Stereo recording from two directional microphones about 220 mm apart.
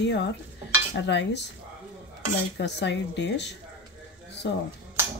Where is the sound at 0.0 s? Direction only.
55° left (ahead or behind).